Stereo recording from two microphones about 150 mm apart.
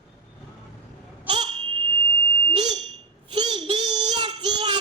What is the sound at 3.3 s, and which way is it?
Child singing, 30° right (ahead or behind).